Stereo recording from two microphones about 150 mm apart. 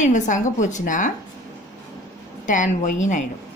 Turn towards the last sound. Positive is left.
turn(degrees=55)  # may be behind; listen again after turning